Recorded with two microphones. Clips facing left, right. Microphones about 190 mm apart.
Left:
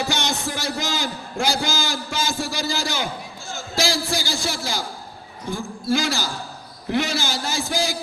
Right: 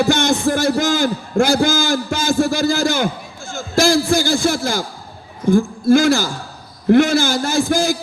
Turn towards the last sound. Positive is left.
turn(degrees=-50)  # may be behind; listen again after turning